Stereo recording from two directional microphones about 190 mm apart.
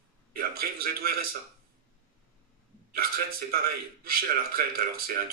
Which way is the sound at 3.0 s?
50° right (ahead or behind).